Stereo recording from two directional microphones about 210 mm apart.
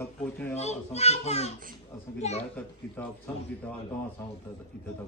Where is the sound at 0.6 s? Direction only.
30° left (ahead or behind).